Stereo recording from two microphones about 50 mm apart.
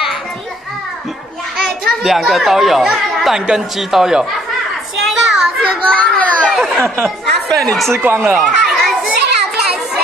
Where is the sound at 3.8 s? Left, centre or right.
Centre.